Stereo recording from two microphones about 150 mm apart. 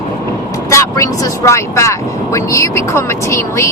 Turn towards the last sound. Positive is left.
turn(degrees=20)  # may be behind; listen again after turning